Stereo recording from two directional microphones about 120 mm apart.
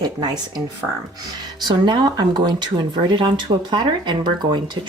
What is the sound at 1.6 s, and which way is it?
Speech, 40° right (ahead or behind).